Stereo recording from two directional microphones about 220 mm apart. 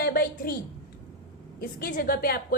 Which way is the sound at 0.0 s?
45° left (ahead or behind).